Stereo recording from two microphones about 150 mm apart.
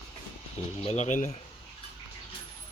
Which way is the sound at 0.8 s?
50° left (ahead or behind).